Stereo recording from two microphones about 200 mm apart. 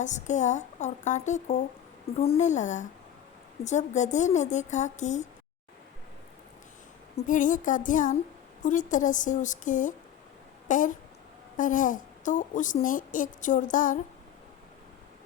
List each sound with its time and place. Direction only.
0.0 s a woman's voice: 35° left (ahead or behind)
7.2 s a woman's voice: 40° left (ahead or behind)